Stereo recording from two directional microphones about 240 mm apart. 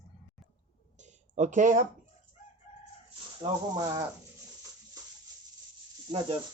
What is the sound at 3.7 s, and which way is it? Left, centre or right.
Speech, centre.